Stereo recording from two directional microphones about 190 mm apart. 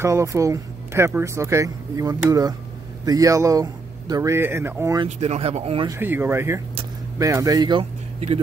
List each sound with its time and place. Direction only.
0.0 s speech: 15° right (ahead or behind)
5.0 s speech: 35° right (ahead or behind)
5.9 s speech: 10° right (ahead or behind); by 8.4 s 30° right (ahead or behind)